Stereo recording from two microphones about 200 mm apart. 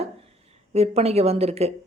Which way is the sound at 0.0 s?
30° right (ahead or behind).